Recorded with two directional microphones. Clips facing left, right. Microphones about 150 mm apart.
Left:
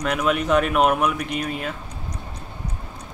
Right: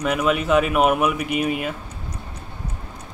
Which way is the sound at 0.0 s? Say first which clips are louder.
Right 1 dB; 5° right (ahead or behind).